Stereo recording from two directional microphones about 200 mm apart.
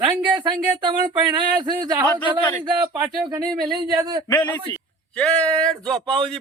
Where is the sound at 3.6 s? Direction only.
20° right (ahead or behind).